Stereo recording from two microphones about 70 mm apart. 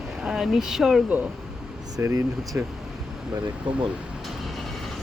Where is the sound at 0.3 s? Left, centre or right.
Centre.